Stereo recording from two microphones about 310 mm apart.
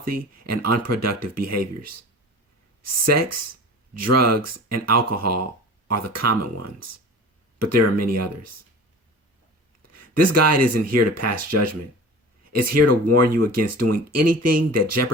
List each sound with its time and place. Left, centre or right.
0.0 s speech: right
9.8 s speech: right